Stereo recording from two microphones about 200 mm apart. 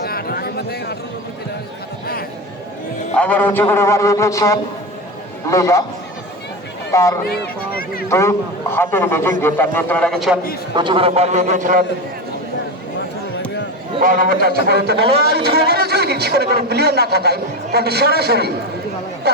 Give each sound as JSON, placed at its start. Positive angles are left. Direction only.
{"t": 0.0, "sound": "a sound", "side_deg": 50}
{"t": 3.2, "sound": "a man's voice", "side_deg": 10}
{"t": 6.9, "sound": "a man's voice", "side_deg": 15}
{"t": 7.3, "sound": "speech", "side_deg": 50}
{"t": 8.1, "sound": "a man's voice", "side_deg": 15}
{"t": 10.8, "sound": "a man's voice", "side_deg": -25}
{"t": 14.0, "sound": "a man's voice", "side_deg": -45}